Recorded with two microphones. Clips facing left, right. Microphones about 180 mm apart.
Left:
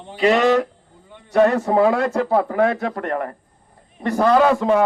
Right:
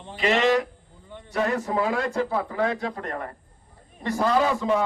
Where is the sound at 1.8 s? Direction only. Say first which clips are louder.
Left 7 dB; 60° left (ahead or behind).